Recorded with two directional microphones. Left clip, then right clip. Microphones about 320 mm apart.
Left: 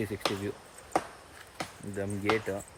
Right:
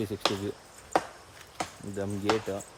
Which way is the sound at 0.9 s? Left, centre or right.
Right.